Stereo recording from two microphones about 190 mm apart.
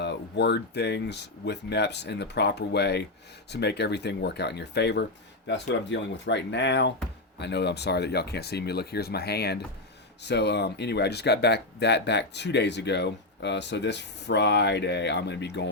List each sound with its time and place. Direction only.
0.0 s speech: 65° left (ahead or behind)